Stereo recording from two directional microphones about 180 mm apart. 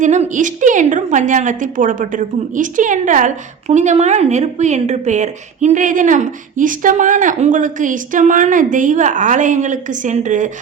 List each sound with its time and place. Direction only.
0.0 s a woman's voice: 40° right (ahead or behind)